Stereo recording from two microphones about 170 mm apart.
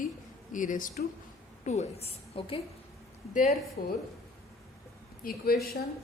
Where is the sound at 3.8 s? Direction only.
45° left (ahead or behind).